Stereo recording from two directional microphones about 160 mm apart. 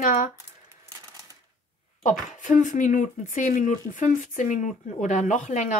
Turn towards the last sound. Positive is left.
turn(degrees=50)  # may be behind; listen again after turning